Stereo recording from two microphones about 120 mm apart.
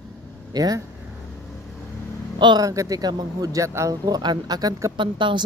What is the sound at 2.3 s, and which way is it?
Speech, 35° right (ahead or behind).